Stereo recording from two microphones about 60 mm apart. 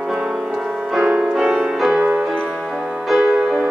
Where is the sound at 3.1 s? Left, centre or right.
Centre.